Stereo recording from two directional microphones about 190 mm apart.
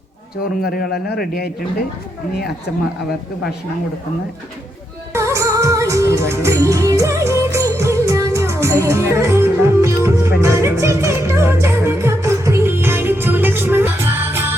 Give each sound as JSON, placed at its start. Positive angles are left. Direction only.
{"t": 0.6, "sound": "a man's voice", "side_deg": 55}
{"t": 5.1, "sound": "music", "side_deg": -15}